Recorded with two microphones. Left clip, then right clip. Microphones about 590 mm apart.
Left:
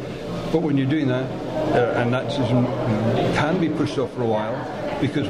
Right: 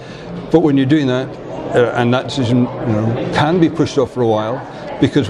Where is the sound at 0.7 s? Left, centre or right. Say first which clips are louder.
Right 8 dB; right.